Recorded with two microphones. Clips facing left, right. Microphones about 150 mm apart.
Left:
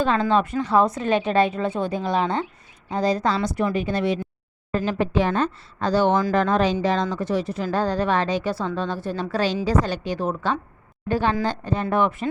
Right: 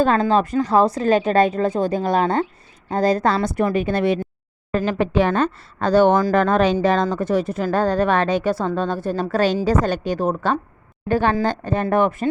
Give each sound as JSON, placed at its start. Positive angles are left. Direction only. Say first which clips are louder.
{"t": 0.0, "sound": "a woman's voice", "louder": "right 3 dB", "side_deg": -45}